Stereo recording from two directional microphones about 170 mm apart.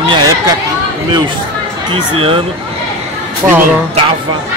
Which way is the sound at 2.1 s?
35° right (ahead or behind).